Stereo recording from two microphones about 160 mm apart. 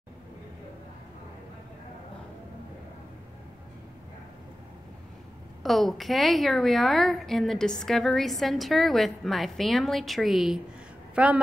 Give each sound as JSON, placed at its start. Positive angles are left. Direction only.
{"t": 5.6, "sound": "a woman's voice", "side_deg": 0}